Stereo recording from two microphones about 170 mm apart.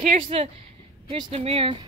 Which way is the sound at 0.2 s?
35° right (ahead or behind).